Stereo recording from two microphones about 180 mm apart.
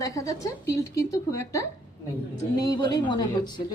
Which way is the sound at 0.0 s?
20° left (ahead or behind).